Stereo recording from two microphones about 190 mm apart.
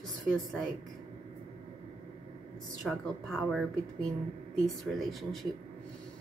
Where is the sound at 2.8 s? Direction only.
Centre (ahead or behind).